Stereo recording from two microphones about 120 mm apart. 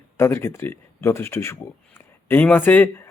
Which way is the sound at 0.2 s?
20° left (ahead or behind).